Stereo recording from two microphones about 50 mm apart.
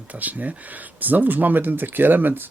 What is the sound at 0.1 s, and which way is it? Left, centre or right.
Speech, right.